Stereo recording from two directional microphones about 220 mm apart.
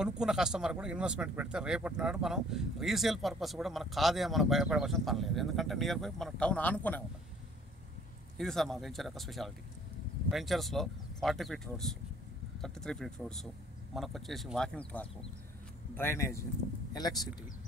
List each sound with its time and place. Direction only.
0.0 s speech: 5° right (ahead or behind)
8.4 s speech: centre (ahead or behind); by 17.5 s 15° left (ahead or behind)